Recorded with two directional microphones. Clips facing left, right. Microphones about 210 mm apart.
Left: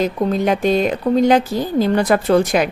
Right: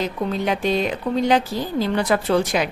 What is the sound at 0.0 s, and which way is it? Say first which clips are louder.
Speech: left 6 dB; 45° left (ahead or behind).